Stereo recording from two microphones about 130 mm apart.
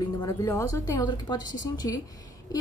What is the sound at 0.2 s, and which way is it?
A woman's voice, 25° left (ahead or behind).